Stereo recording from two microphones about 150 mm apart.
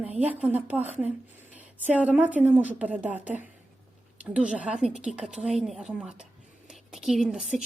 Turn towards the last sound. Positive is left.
turn(degrees=-5)  # may be behind; listen again after turning